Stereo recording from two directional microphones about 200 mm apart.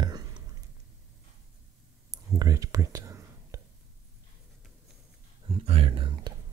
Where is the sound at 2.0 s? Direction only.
20° right (ahead or behind).